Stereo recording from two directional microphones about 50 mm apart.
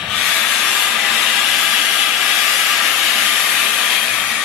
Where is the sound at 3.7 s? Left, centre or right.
Centre.